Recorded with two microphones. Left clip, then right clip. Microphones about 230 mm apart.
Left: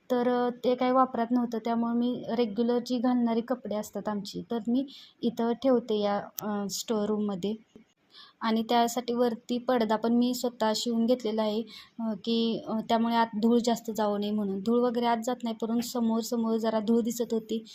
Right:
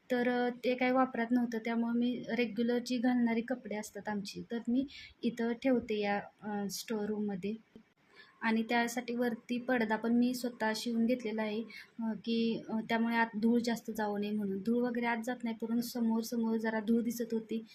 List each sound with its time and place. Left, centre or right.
0.1 s speech: centre